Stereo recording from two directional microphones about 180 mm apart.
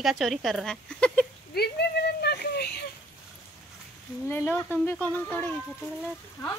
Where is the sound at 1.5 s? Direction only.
65° left (ahead or behind).